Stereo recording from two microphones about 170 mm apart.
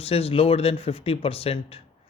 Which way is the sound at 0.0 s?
35° left (ahead or behind).